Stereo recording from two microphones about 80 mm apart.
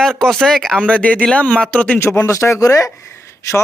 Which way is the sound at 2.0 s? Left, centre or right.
Left.